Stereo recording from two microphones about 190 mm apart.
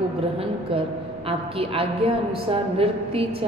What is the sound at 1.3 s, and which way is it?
A woman's voice, 30° right (ahead or behind).